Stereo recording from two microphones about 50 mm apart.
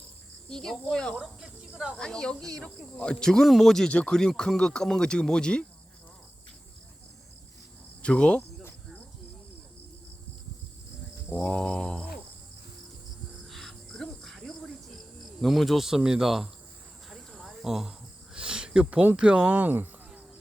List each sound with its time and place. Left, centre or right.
0.4 s speech: centre
1.2 s speech: centre
2.0 s speech: centre
3.8 s a sound: left
4.4 s speech: centre
8.0 s a sound: left
11.3 s a sound: centre
13.5 s cricket: centre
15.4 s speech: centre
16.0 s speech: centre
17.1 s cricket: centre
17.6 s speech: centre
18.3 s a sound: centre
19.1 s speech: right